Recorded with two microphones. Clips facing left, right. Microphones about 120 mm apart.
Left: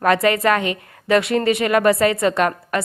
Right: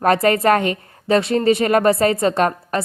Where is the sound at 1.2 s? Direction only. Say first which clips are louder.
Right 2 dB; 30° right (ahead or behind).